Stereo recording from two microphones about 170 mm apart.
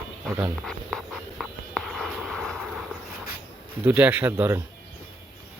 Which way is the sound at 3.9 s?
10° right (ahead or behind).